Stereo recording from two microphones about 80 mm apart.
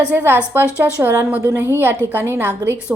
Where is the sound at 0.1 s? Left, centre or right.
Right.